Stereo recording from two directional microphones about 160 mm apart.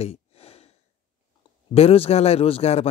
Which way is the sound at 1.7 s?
40° left (ahead or behind).